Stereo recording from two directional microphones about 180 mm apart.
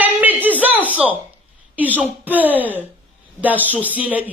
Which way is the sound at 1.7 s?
10° right (ahead or behind).